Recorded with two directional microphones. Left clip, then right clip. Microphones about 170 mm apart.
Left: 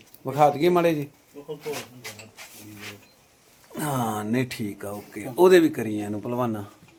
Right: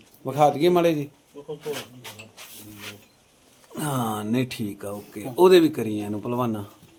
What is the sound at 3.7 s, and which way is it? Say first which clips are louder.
Speech: even; centre (ahead or behind).